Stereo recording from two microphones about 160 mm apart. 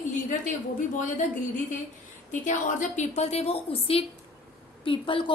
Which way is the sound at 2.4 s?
50° left (ahead or behind).